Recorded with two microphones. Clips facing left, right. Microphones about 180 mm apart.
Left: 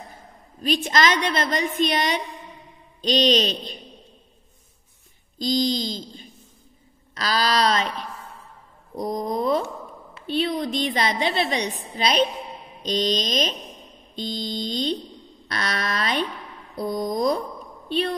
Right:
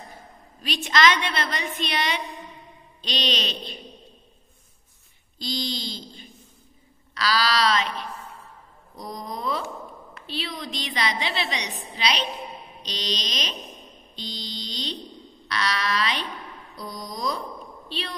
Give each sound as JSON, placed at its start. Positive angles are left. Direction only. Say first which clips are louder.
{"t": 0.6, "sound": "a woman's voice", "louder": "left 2 dB", "side_deg": 45}
{"t": 5.4, "sound": "a woman's voice", "louder": "left 8 dB", "side_deg": 45}
{"t": 7.2, "sound": "a woman's voice", "louder": "left 1 dB", "side_deg": 45}
{"t": 8.9, "sound": "a woman's voice", "louder": "left 9 dB", "side_deg": 50}